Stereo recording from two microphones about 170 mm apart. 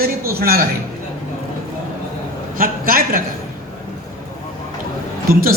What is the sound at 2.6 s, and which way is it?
Speech, 60° right (ahead or behind).